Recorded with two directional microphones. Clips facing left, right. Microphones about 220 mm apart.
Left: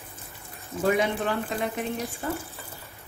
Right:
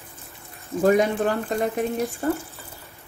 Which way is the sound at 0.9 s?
45° right (ahead or behind).